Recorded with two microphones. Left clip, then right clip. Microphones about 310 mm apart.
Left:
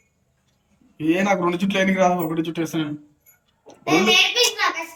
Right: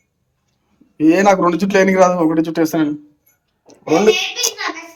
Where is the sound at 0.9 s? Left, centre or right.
Centre.